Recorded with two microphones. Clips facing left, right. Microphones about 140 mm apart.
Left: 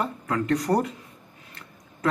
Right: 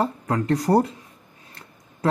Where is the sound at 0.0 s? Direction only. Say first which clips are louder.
Right 3 dB; 35° right (ahead or behind).